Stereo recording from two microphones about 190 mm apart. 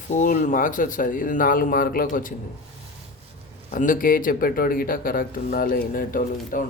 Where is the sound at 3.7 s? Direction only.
45° left (ahead or behind).